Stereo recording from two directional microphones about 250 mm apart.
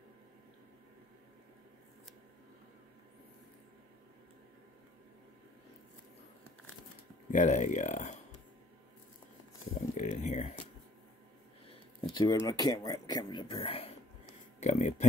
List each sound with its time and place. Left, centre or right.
7.2 s speech: left
9.9 s a sound: left
12.1 s speech: centre